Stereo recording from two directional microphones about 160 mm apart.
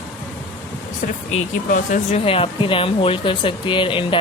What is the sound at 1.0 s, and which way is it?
Speech, 55° left (ahead or behind).